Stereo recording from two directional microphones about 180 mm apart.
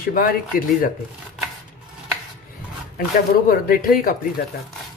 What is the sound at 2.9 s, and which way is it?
Speech, 55° left (ahead or behind).